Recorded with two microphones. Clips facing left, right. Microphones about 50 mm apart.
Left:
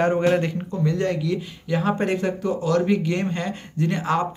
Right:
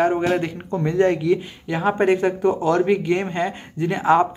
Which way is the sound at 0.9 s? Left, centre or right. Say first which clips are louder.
Right 8 dB; right.